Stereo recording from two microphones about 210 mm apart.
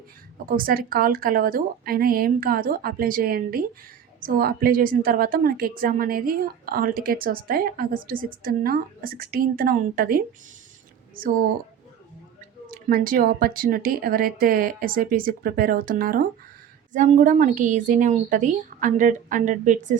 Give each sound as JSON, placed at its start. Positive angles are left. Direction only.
{"t": 0.4, "sound": "a woman's voice", "side_deg": -45}
{"t": 12.7, "sound": "a woman's voice", "side_deg": -40}